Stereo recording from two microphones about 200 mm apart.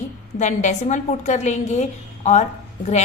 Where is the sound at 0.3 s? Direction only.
35° left (ahead or behind).